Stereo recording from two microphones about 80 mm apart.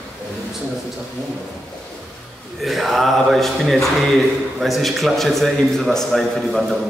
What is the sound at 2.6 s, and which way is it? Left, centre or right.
Speech, centre.